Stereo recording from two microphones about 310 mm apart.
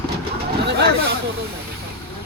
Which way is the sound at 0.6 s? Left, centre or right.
Right.